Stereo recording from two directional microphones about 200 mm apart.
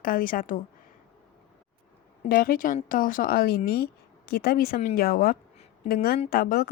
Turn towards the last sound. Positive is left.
turn(degrees=50)  # may be behind; listen again after turning